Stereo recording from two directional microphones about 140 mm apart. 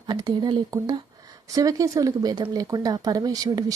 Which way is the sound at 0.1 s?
30° right (ahead or behind).